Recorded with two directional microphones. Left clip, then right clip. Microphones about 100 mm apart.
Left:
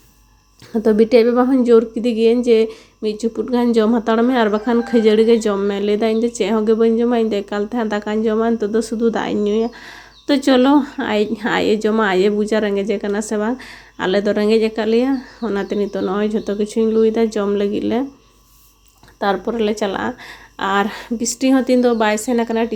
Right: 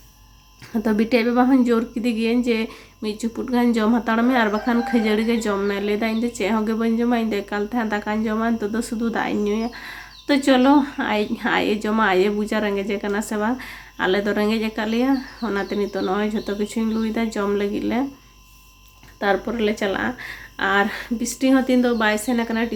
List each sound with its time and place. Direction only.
0.7 s a woman's voice: 30° left (ahead or behind); by 18.0 s 50° left (ahead or behind)
19.2 s a woman's voice: 45° left (ahead or behind)